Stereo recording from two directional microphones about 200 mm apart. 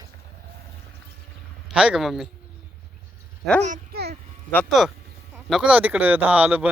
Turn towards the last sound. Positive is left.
turn(degrees=-5)  # may be behind; listen again after turning